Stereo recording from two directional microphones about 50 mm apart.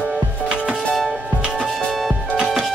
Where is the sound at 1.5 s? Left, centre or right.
Centre.